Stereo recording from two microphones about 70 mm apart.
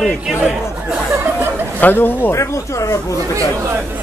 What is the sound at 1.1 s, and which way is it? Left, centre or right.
Chuckle, right.